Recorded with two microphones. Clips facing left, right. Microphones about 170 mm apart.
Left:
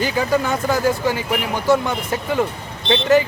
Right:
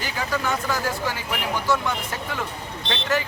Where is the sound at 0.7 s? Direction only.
20° left (ahead or behind).